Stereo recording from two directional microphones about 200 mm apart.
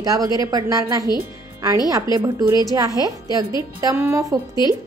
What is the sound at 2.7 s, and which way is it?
Speech, 15° right (ahead or behind).